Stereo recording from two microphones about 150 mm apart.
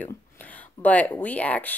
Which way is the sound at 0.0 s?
10° left (ahead or behind).